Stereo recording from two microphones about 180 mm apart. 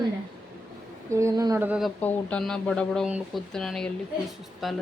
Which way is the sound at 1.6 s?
5° right (ahead or behind).